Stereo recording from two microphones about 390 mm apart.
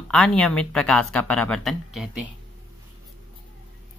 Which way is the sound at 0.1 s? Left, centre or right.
Centre.